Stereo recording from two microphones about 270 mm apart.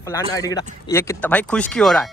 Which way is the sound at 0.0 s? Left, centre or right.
Centre.